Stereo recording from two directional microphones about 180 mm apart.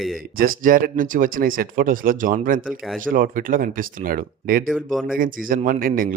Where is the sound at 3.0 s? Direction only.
50° right (ahead or behind).